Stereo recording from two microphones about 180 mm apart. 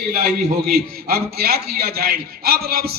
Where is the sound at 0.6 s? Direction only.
60° right (ahead or behind).